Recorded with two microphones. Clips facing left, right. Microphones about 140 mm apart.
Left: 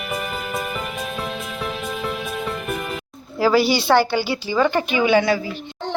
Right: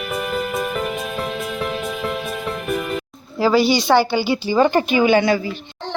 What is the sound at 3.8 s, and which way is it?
Speech, 15° right (ahead or behind).